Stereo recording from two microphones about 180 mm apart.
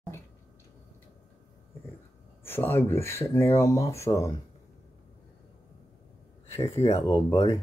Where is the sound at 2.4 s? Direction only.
10° left (ahead or behind).